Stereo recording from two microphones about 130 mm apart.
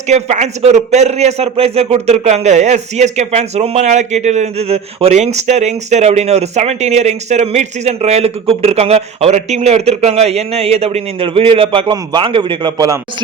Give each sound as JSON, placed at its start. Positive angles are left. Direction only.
{"t": 0.1, "sound": "a man's voice", "side_deg": -60}